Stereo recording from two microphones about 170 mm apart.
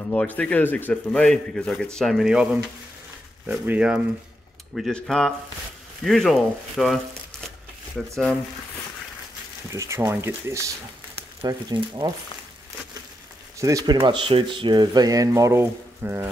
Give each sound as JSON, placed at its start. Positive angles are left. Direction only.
{"t": 0.4, "sound": "a man's voice", "side_deg": 10}
{"t": 9.7, "sound": "speech", "side_deg": -15}
{"t": 13.6, "sound": "speech", "side_deg": -20}